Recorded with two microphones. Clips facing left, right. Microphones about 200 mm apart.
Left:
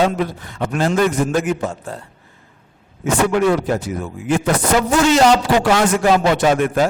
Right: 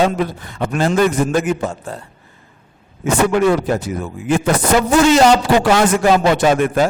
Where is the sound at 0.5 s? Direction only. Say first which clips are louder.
Right 2 dB; 15° right (ahead or behind).